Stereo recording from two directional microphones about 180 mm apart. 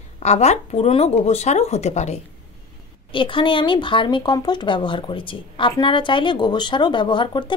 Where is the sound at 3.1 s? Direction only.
25° left (ahead or behind).